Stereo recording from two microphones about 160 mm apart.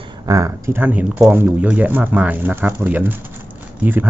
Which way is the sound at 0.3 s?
20° right (ahead or behind).